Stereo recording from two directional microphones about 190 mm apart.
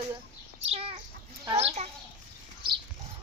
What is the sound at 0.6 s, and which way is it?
Chicken, 30° right (ahead or behind).